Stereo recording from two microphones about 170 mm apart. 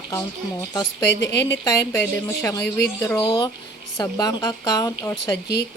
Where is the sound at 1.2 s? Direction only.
90° left.